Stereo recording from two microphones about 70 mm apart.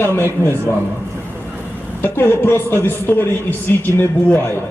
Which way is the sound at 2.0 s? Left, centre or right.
Left.